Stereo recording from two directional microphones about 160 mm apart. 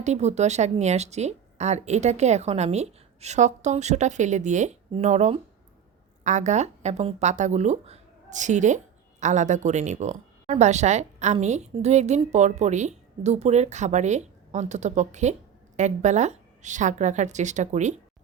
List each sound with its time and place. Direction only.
0.0 s a woman's voice: 45° right (ahead or behind)